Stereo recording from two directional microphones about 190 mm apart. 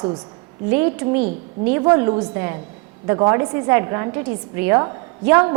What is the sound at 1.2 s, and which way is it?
Speech, 45° right (ahead or behind).